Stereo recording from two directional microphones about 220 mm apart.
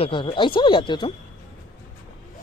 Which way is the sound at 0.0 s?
20° left (ahead or behind).